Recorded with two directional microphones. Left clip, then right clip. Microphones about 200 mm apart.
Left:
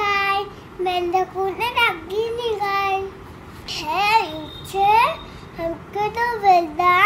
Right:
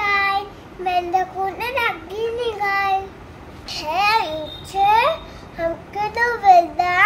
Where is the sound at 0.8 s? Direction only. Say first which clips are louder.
Right 1 dB; 10° right (ahead or behind).